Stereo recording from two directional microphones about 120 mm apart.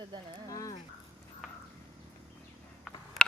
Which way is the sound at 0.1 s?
35° right (ahead or behind).